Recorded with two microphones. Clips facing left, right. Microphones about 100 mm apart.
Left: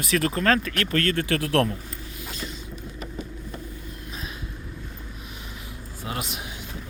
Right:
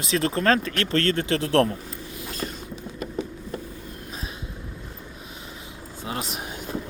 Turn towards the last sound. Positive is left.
turn(degrees=-30)  # may be behind; listen again after turning